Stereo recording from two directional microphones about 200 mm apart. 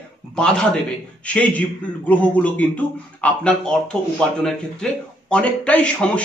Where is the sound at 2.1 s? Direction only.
10° left (ahead or behind).